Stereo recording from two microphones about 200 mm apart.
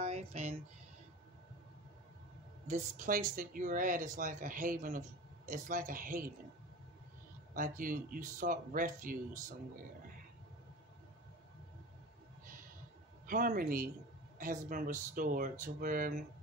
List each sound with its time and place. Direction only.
0.0 s a sound: 35° right (ahead or behind)
2.7 s speech: 40° right (ahead or behind)
7.5 s speech: 45° right (ahead or behind)
13.3 s speech: 45° right (ahead or behind)